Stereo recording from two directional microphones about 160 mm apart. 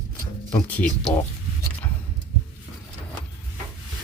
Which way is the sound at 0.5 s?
10° left (ahead or behind).